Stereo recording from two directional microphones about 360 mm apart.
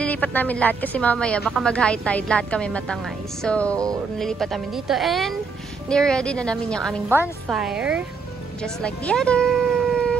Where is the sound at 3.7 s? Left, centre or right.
Centre.